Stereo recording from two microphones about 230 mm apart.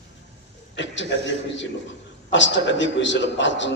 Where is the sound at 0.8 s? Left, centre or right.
Left.